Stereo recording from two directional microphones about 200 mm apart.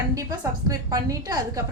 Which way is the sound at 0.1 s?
15° right (ahead or behind).